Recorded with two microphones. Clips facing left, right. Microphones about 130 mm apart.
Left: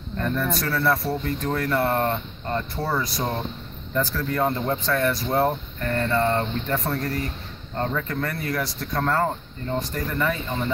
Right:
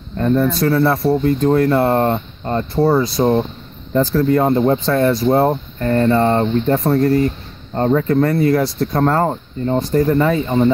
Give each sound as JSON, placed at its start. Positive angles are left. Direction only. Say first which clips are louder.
{"t": 0.2, "sound": "speech", "louder": "right 10 dB", "side_deg": -25}